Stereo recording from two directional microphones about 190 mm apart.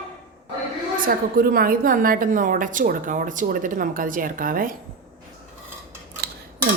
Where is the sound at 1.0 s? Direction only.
50° right (ahead or behind).